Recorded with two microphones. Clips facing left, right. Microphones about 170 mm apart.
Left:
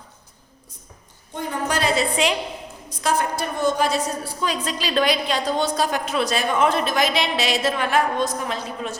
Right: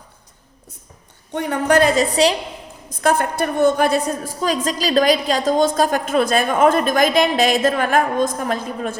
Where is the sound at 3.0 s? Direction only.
55° right (ahead or behind).